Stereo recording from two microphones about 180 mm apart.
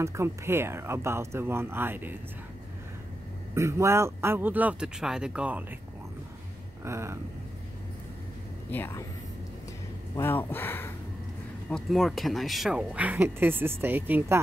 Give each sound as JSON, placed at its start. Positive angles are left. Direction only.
{"t": 0.0, "sound": "speech", "side_deg": -15}
{"t": 3.5, "sound": "speech", "side_deg": -15}
{"t": 6.8, "sound": "vehicle", "side_deg": -15}
{"t": 8.6, "sound": "speech", "side_deg": 10}
{"t": 10.1, "sound": "speech", "side_deg": 10}
{"t": 11.7, "sound": "speech", "side_deg": 0}